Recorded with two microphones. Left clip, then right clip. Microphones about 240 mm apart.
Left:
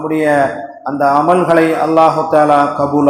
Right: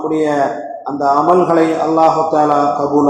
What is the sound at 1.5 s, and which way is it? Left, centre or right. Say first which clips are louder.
Speech: left 2 dB; left.